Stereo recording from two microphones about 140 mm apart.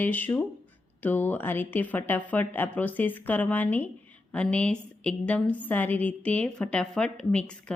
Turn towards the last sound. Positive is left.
turn(degrees=5)  # may be behind; listen again after turning